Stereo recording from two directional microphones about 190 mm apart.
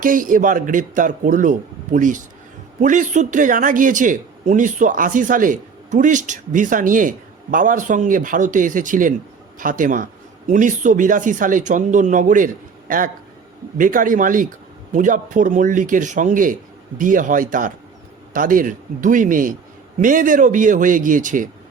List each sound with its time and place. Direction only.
0.0 s a man's voice: 45° right (ahead or behind)
13.7 s a man's voice: 45° right (ahead or behind)